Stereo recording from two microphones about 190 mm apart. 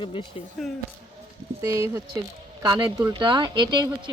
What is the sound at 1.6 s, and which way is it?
A woman's voice, 15° right (ahead or behind).